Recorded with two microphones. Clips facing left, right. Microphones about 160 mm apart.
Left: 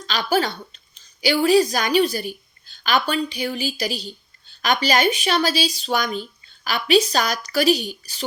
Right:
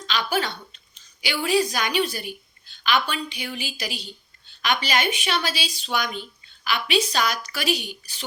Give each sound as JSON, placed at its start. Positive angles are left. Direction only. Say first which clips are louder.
{"t": 0.1, "sound": "a woman's voice", "louder": "left 4 dB", "side_deg": 35}